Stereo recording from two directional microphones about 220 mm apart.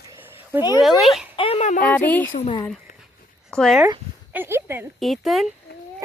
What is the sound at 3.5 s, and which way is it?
Speech, centre (ahead or behind).